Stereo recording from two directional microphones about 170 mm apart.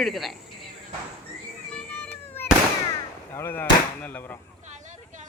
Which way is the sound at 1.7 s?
10° left (ahead or behind).